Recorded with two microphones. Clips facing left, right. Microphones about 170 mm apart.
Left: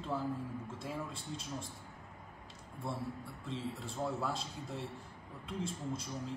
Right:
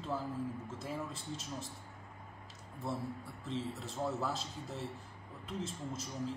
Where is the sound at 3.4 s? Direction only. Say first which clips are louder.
Right 1 dB; centre (ahead or behind).